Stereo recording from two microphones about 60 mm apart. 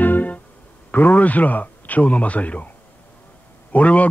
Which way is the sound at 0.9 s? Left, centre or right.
Left.